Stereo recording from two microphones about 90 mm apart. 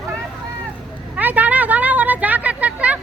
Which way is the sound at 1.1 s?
15° right (ahead or behind).